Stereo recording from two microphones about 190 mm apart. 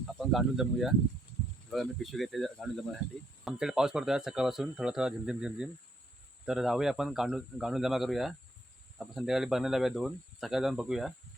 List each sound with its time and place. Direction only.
0.2 s speech: centre (ahead or behind)